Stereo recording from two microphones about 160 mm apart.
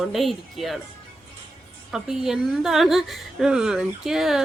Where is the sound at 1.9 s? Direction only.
5° right (ahead or behind).